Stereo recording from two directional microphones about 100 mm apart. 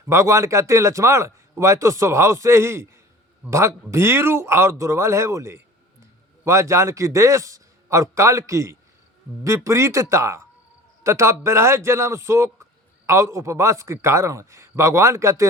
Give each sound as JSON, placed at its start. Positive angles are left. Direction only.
{"t": 0.0, "sound": "a man's voice", "side_deg": -30}